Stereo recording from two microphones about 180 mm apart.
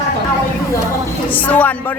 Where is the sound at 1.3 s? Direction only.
10° left (ahead or behind).